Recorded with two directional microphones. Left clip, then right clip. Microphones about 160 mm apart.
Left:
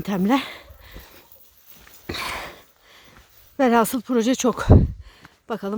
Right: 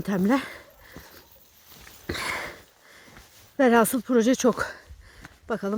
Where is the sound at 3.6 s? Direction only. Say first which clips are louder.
Left 1 dB; 15° left (ahead or behind).